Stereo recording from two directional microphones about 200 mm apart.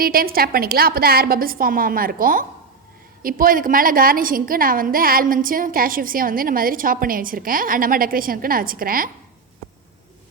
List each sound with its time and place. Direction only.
0.0 s a woman's voice: 45° right (ahead or behind)